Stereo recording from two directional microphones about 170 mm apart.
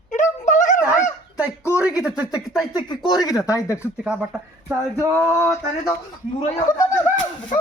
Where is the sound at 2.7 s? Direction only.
25° left (ahead or behind).